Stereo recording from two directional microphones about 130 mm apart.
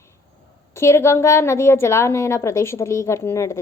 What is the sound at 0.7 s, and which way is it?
A woman's voice, 20° left (ahead or behind).